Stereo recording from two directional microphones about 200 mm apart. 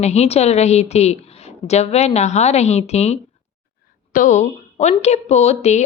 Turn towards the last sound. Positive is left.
turn(degrees=35)  # may be behind; listen again after turning